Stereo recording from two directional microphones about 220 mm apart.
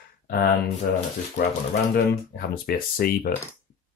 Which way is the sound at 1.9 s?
40° left (ahead or behind).